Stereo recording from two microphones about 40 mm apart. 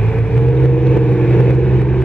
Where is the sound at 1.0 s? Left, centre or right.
Left.